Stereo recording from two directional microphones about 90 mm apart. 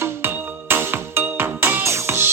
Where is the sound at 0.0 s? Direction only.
25° right (ahead or behind).